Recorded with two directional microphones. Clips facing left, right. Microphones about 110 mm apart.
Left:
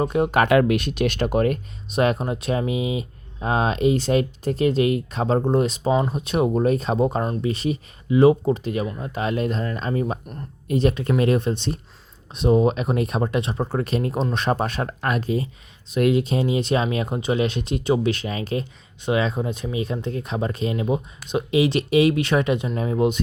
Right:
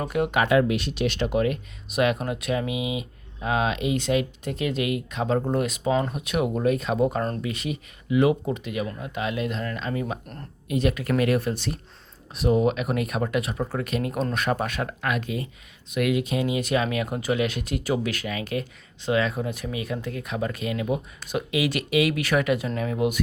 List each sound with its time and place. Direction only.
0.0 s speech: 30° left (ahead or behind)
0.3 s speech: 60° left (ahead or behind); by 1.5 s 45° left (ahead or behind)
1.9 s speech: 30° left (ahead or behind)